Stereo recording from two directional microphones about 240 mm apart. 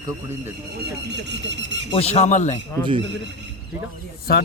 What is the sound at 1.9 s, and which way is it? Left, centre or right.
Speech, left.